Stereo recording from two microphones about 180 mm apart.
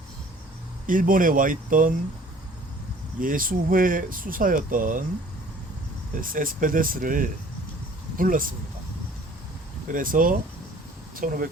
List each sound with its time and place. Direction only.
0.9 s speech: 50° right (ahead or behind)
3.2 s speech: 50° right (ahead or behind)
6.1 s speech: 50° right (ahead or behind)
9.9 s speech: 50° right (ahead or behind)